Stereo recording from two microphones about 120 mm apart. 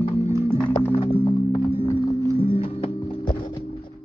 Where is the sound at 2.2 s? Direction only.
20° right (ahead or behind).